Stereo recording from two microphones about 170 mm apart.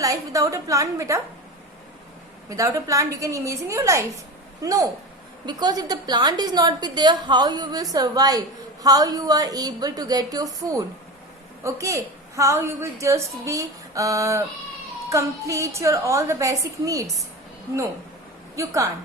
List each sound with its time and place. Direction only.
0.0 s a woman's voice: 20° right (ahead or behind)
2.5 s a woman's voice: 20° right (ahead or behind)
18.5 s a woman's voice: 20° right (ahead or behind)